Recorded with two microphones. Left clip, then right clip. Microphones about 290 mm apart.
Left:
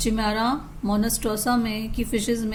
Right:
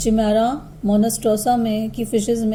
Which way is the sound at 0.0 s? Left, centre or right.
Centre.